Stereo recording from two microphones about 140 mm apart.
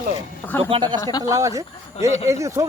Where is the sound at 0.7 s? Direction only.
30° right (ahead or behind).